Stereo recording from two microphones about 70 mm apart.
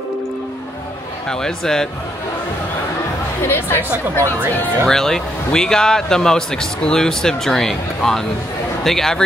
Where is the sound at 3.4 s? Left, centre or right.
Left.